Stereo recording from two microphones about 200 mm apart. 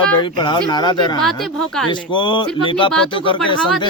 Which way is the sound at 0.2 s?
25° left (ahead or behind).